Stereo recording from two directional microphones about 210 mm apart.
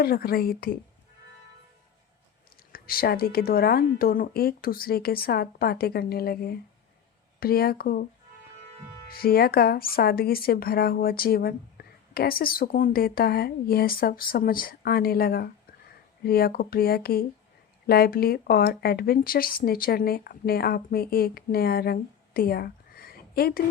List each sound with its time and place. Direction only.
0.0 s speech: 45° left (ahead or behind)
2.7 s speech: 45° left (ahead or behind)
9.0 s speech: 45° left (ahead or behind)